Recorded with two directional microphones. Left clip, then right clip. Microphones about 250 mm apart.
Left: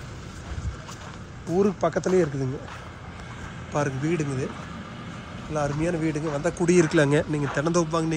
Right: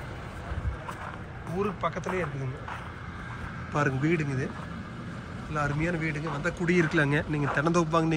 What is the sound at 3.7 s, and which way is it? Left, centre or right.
Speech, centre.